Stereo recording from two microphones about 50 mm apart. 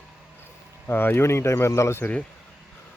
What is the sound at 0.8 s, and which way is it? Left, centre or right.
Speech, left.